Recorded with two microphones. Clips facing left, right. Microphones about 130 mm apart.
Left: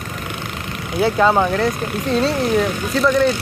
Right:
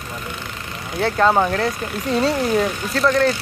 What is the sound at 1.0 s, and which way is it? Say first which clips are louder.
Speech: left 1 dB; centre (ahead or behind).